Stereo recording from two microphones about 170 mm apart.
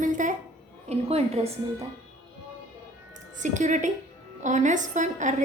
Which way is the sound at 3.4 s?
45° right (ahead or behind).